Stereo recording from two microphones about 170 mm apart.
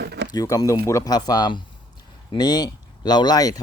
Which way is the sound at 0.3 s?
20° left (ahead or behind).